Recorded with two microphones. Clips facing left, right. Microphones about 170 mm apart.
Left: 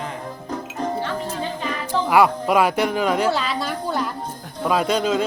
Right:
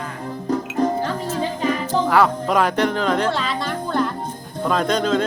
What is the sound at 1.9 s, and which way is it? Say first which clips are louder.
Speech: left 2 dB; 10° left (ahead or behind).